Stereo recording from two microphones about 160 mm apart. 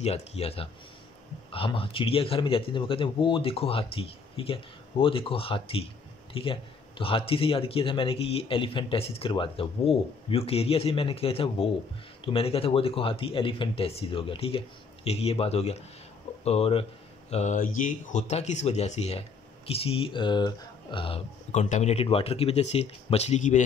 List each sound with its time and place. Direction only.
0.0 s a man's voice: 40° left (ahead or behind)
21.5 s a man's voice: 50° left (ahead or behind)